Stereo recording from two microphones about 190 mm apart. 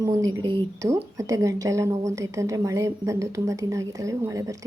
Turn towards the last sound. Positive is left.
turn(degrees=-15)  # may be behind; listen again after turning